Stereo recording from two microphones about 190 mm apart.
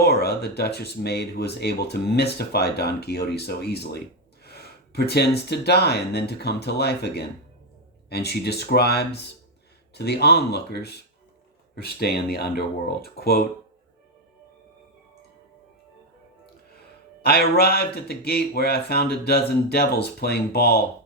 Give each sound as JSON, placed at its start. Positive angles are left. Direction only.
{"t": 0.0, "sound": "speech", "side_deg": 55}
{"t": 17.2, "sound": "speech", "side_deg": 55}